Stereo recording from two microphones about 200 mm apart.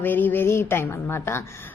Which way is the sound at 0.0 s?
10° left (ahead or behind).